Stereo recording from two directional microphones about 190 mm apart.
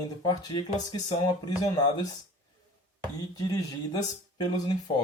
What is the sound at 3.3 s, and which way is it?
Speech, 20° left (ahead or behind).